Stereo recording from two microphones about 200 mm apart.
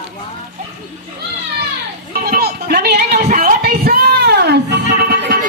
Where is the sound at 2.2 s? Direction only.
50° right (ahead or behind).